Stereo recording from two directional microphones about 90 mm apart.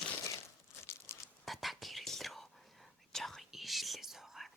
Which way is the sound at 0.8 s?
30° left (ahead or behind).